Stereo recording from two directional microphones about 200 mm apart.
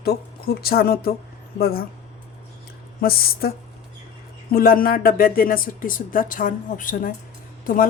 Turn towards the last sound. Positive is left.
turn(degrees=45)  # may be behind; listen again after turning